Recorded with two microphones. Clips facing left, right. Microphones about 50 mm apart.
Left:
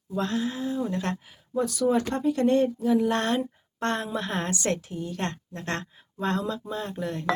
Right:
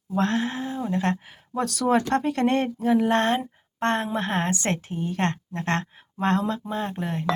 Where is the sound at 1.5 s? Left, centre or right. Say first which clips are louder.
Right 1 dB; right.